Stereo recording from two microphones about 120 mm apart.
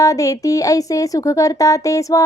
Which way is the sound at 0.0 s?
25° left (ahead or behind).